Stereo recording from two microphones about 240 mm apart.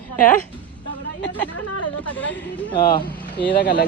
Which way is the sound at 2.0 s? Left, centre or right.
Centre.